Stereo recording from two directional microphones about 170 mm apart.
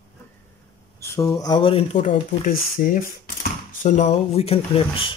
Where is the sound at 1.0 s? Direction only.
15° left (ahead or behind).